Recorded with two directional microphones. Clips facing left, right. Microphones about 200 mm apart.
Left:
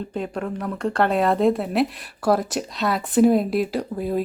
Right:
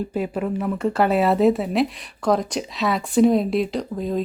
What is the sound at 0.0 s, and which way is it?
Speech, 5° right (ahead or behind).